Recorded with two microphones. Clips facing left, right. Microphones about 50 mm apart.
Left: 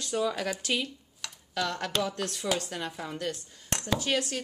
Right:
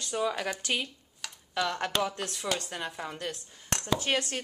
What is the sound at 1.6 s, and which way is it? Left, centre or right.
Speech, centre.